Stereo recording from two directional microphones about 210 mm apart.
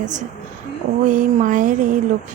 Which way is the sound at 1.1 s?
40° right (ahead or behind).